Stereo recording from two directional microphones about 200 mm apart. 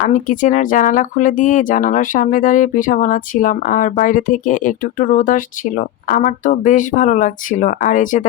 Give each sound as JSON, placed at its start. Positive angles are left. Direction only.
{"t": 0.0, "sound": "speech", "side_deg": 40}